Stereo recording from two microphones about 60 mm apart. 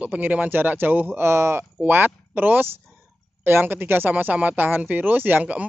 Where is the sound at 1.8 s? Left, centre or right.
Right.